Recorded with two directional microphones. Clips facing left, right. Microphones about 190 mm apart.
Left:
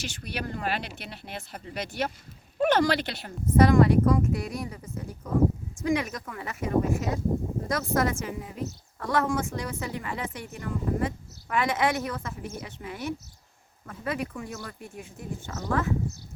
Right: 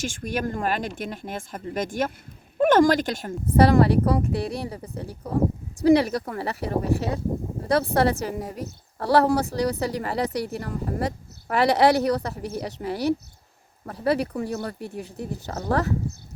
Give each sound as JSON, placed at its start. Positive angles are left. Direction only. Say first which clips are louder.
{"t": 0.0, "sound": "speech", "louder": "right 7 dB", "side_deg": -45}
{"t": 3.6, "sound": "a woman's voice", "louder": "right 2 dB", "side_deg": -35}